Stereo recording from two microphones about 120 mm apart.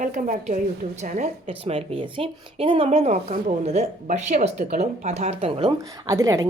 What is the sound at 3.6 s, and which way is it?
Speech, 70° right (ahead or behind).